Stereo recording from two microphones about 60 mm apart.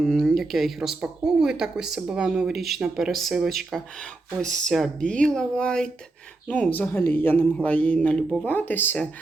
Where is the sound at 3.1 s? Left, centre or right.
Centre.